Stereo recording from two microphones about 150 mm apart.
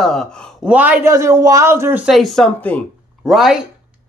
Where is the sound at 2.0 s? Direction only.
Centre (ahead or behind).